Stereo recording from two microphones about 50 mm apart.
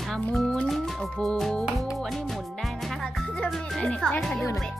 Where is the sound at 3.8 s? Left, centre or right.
Centre.